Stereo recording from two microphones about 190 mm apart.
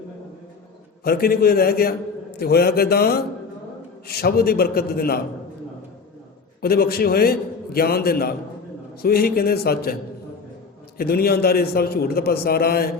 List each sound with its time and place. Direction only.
1.0 s a man's voice: 50° left (ahead or behind)
6.6 s a man's voice: 55° left (ahead or behind)